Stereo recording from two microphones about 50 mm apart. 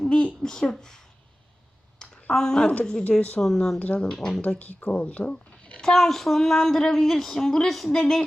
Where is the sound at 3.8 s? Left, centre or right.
Left.